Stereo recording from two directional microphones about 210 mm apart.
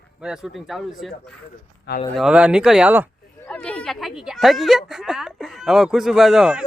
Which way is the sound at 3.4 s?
5° left (ahead or behind).